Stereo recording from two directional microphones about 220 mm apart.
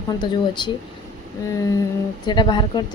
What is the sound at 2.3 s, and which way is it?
Speech, 20° left (ahead or behind).